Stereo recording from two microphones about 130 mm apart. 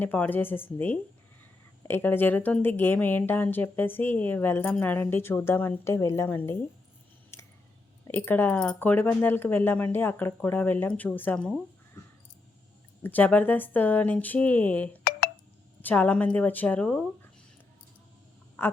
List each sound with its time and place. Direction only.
0.0 s a woman's voice: 15° left (ahead or behind)
7.3 s scissors: 20° left (ahead or behind)
8.0 s a woman's voice: 15° left (ahead or behind)
13.0 s a woman's voice: 15° left (ahead or behind)
15.1 s telephone dialing: 90° left
15.8 s a woman's voice: 15° left (ahead or behind)